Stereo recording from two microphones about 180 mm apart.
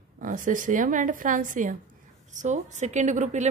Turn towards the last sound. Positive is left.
turn(degrees=-40)  # may be behind; listen again after turning